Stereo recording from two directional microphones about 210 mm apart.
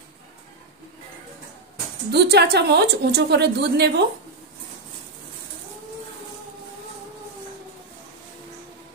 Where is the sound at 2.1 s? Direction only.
50° right (ahead or behind).